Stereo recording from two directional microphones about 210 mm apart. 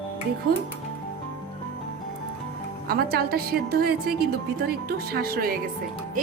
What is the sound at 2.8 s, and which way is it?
A woman's voice, 45° right (ahead or behind).